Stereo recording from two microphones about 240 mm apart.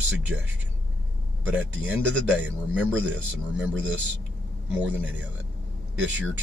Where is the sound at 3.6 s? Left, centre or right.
Centre.